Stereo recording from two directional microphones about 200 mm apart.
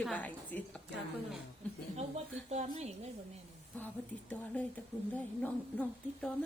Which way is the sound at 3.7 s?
10° left (ahead or behind).